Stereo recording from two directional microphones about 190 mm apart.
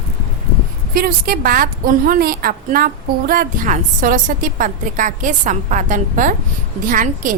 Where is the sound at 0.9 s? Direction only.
55° right (ahead or behind).